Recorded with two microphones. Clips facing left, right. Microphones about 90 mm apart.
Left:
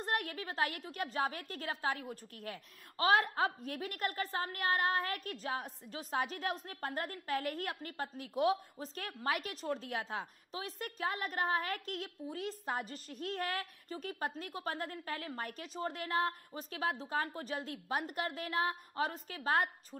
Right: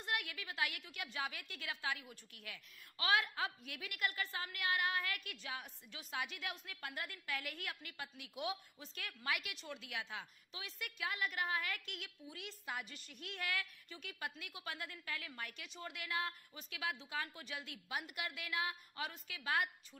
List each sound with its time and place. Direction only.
0.0 s a woman's voice: 40° left (ahead or behind)